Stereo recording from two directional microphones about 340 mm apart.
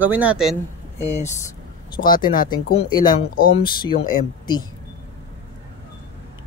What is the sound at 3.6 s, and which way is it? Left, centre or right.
Speech, centre.